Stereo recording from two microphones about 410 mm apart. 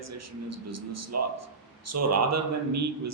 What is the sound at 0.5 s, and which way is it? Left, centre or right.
A man's voice, right.